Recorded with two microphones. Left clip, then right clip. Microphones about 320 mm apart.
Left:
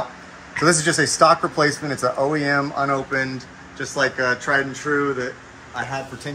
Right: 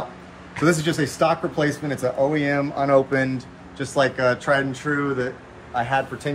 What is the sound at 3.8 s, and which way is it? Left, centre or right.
Speech, right.